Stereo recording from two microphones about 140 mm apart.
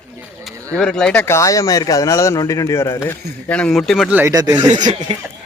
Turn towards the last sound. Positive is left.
turn(degrees=-50)  # may be behind; listen again after turning